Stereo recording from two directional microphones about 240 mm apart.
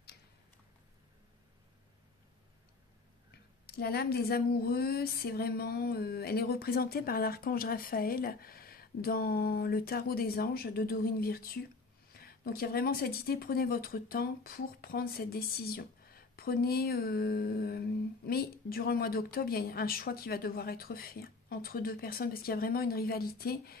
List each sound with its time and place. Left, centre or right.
3.6 s speech: left